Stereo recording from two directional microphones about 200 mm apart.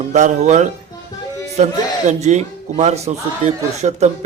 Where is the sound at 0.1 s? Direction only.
35° right (ahead or behind).